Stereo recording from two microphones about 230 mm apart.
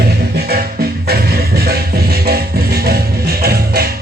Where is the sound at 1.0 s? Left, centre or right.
Right.